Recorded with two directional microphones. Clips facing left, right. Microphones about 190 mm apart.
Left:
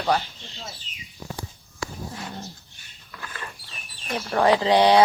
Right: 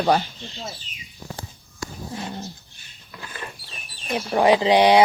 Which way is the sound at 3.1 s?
20° right (ahead or behind).